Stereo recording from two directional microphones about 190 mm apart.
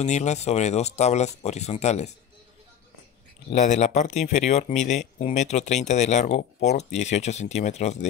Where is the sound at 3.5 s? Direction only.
40° left (ahead or behind).